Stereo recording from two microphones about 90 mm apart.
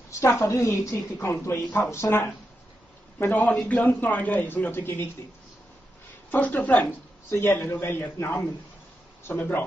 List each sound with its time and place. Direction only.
0.2 s a woman's voice: 30° left (ahead or behind)
6.3 s speech: 15° left (ahead or behind)